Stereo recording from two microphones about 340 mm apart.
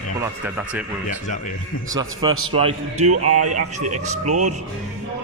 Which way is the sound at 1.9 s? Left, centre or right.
Centre.